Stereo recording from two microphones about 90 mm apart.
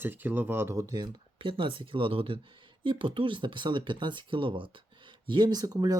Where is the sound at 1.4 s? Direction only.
70° right (ahead or behind); by 2.4 s 90° right.